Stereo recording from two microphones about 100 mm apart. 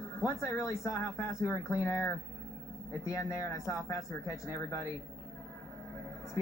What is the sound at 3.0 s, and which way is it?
Speech, 35° left (ahead or behind).